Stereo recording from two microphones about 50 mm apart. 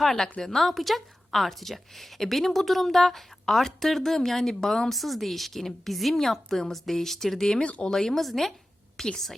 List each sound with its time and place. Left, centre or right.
0.0 s a woman's voice: centre
7.6 s speech: left
7.9 s a woman's voice: centre